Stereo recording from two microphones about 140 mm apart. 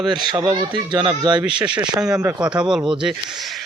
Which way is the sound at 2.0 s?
5° right (ahead or behind).